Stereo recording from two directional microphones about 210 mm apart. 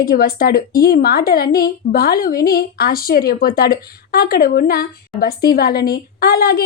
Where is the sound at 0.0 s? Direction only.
45° left (ahead or behind).